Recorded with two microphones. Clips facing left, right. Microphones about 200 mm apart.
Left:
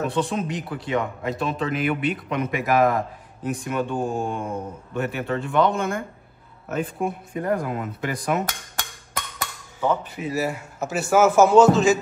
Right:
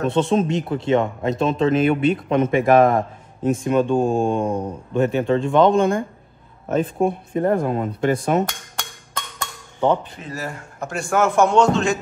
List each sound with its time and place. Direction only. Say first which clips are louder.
0.1 s speech: right 6 dB; 25° right (ahead or behind)
8.5 s music: even; 5° left (ahead or behind)
10.1 s a man's voice: left 5 dB; 10° left (ahead or behind)